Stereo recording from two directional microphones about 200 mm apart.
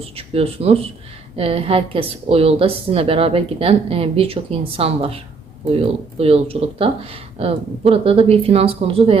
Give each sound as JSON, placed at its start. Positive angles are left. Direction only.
{"t": 0.0, "sound": "a woman's voice", "side_deg": -30}